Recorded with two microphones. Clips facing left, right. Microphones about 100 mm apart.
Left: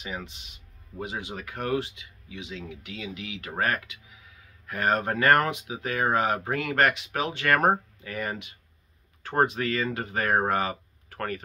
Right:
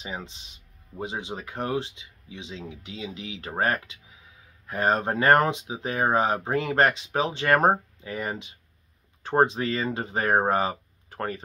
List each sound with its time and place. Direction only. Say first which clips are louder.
0.0 s speech: even; 25° right (ahead or behind)